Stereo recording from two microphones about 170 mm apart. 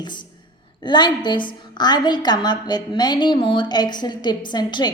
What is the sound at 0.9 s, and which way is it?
A woman's voice, 25° left (ahead or behind).